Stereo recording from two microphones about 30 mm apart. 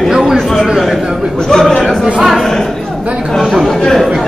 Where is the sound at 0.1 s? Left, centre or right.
Centre.